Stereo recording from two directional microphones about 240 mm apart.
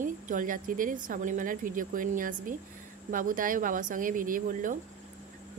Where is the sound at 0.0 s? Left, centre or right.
Right.